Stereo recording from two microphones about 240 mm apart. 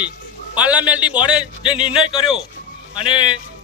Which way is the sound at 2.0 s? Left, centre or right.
Left.